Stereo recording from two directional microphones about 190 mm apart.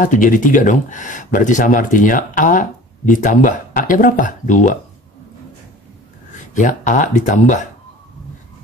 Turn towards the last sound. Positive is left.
turn(degrees=40)  # may be behind; listen again after turning